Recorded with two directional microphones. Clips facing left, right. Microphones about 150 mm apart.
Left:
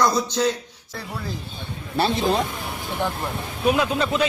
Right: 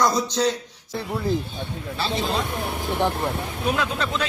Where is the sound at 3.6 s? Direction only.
10° left (ahead or behind).